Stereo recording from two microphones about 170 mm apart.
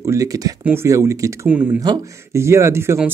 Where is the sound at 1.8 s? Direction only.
20° right (ahead or behind).